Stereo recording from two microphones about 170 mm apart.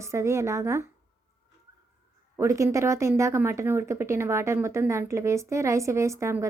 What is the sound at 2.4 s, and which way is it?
A woman's voice, 15° right (ahead or behind).